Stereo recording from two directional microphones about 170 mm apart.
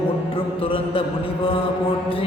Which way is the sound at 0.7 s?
30° left (ahead or behind).